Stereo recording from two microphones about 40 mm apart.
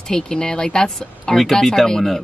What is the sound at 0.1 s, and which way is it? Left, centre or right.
Speech, centre.